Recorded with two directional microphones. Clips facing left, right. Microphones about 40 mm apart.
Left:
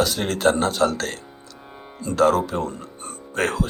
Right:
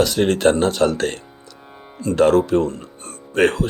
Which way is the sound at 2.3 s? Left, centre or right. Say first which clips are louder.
Right 7 dB; centre.